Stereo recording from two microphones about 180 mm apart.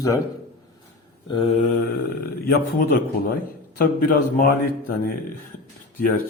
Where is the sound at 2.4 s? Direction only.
55° left (ahead or behind).